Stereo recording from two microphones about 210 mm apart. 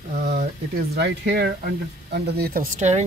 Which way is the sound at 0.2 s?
45° right (ahead or behind).